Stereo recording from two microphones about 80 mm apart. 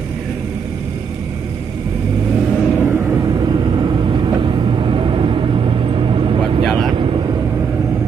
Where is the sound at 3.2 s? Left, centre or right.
Right.